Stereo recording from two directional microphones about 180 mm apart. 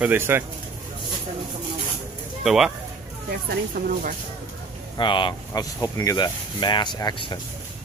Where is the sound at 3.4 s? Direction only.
50° right (ahead or behind).